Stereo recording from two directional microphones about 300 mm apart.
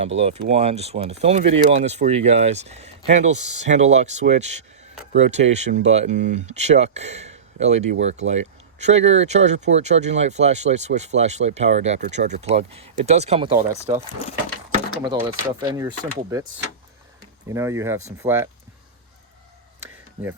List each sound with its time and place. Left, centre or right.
0.2 s speech: right
15.0 s speech: centre
17.5 s speech: centre